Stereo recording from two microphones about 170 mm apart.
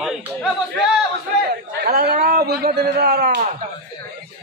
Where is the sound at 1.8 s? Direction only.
65° right (ahead or behind).